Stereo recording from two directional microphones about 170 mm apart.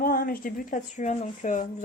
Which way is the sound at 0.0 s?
60° left (ahead or behind).